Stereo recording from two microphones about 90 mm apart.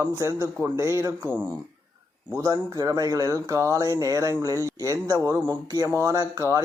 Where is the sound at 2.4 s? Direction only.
35° right (ahead or behind).